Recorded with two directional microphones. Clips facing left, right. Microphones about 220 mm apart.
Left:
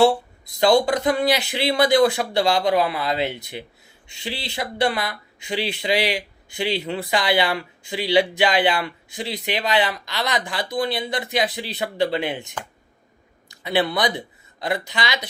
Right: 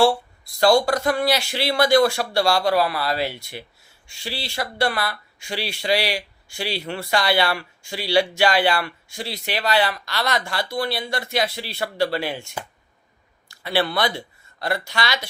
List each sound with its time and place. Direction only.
0.6 s speech: 20° left (ahead or behind)